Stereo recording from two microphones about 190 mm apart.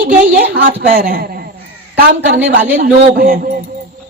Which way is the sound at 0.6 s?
60° right (ahead or behind).